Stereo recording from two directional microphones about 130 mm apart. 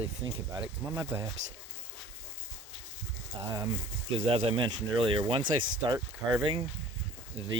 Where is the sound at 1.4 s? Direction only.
65° right (ahead or behind).